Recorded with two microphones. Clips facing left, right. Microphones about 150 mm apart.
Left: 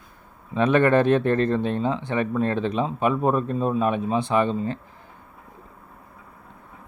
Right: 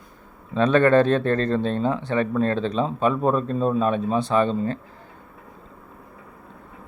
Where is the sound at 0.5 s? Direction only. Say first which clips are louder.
Right 2 dB; 15° left (ahead or behind).